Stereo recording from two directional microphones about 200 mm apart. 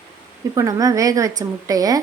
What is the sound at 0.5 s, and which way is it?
Speech, 15° right (ahead or behind).